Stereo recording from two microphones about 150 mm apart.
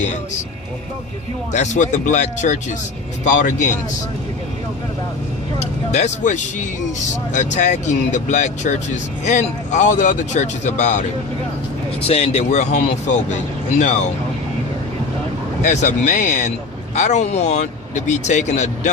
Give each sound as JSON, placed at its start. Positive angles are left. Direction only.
{"t": 1.5, "sound": "speech", "side_deg": 55}
{"t": 5.5, "sound": "speech", "side_deg": 50}
{"t": 12.0, "sound": "speech", "side_deg": 45}
{"t": 15.6, "sound": "speech", "side_deg": 50}